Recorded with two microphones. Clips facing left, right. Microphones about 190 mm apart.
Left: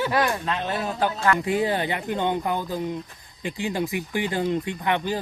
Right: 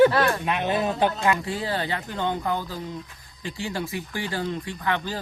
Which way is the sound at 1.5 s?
20° left (ahead or behind).